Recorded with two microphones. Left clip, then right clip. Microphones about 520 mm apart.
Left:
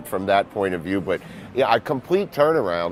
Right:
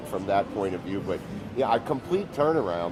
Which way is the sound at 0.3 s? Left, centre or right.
Left.